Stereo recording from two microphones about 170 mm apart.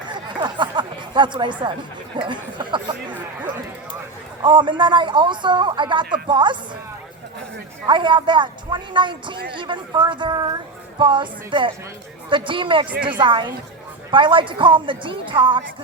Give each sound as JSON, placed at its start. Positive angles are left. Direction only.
{"t": 0.1, "sound": "a sound", "side_deg": -25}
{"t": 2.1, "sound": "a woman's voice", "side_deg": -30}
{"t": 4.4, "sound": "a woman's voice", "side_deg": -25}
{"t": 7.9, "sound": "a woman's voice", "side_deg": -30}
{"t": 12.9, "sound": "a woman's voice", "side_deg": -10}
{"t": 13.1, "sound": "a woman's voice", "side_deg": -30}